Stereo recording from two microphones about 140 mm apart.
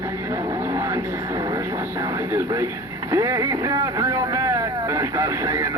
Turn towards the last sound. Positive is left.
turn(degrees=-20)  # may be behind; listen again after turning